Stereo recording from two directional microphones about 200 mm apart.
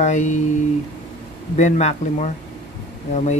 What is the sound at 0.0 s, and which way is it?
Speech, 35° left (ahead or behind).